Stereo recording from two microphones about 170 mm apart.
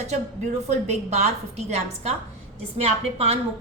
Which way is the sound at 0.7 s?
40° right (ahead or behind).